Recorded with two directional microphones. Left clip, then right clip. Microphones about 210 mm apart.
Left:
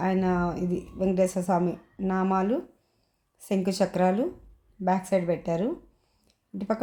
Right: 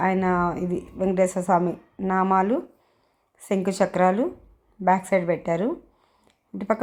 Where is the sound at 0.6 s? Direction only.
35° right (ahead or behind).